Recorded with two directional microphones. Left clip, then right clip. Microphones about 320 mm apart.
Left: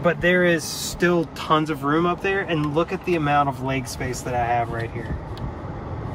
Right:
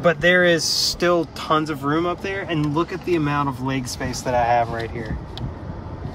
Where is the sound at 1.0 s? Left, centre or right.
Centre.